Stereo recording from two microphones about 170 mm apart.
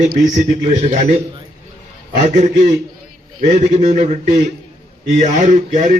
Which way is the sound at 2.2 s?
45° right (ahead or behind).